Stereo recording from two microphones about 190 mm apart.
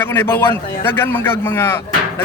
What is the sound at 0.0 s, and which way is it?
Speech, 10° left (ahead or behind).